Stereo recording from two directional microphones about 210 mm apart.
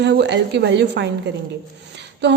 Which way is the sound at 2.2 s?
55° right (ahead or behind).